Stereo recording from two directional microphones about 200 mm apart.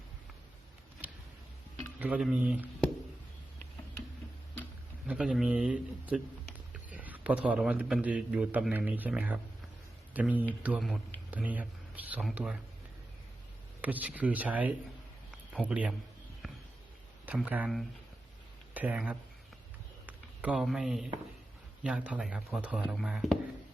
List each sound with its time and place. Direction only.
1.0 s a sound: 10° right (ahead or behind)
2.0 s speech: 5° right (ahead or behind)
5.0 s a man's voice: 5° right (ahead or behind)
13.8 s speech: 10° right (ahead or behind)
15.3 s a sound: 5° right (ahead or behind)
17.2 s speech: 10° right (ahead or behind)